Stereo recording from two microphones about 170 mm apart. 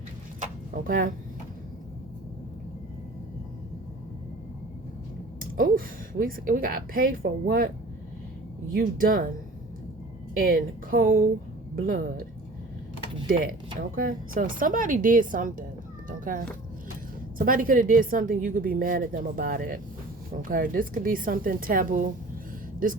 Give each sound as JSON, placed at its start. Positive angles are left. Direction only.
{"t": 0.3, "sound": "a sound", "side_deg": -55}
{"t": 5.4, "sound": "a woman's voice", "side_deg": -55}
{"t": 8.7, "sound": "speech", "side_deg": -55}
{"t": 10.3, "sound": "a woman's voice", "side_deg": -55}
{"t": 13.2, "sound": "a woman's voice", "side_deg": -55}
{"t": 16.0, "sound": "cat", "side_deg": -50}
{"t": 17.3, "sound": "a woman's voice", "side_deg": -55}